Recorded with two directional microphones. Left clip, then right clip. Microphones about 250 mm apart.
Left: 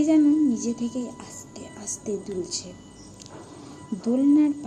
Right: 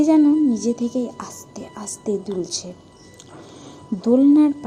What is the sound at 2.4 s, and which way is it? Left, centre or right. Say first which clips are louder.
Speech: right 4 dB; right.